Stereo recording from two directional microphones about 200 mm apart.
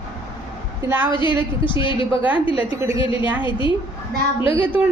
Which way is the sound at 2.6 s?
15° right (ahead or behind).